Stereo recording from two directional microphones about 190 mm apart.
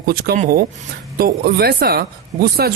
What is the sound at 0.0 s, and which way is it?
Speech, 55° right (ahead or behind).